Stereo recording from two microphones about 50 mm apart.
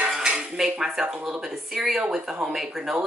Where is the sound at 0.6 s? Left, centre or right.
Centre.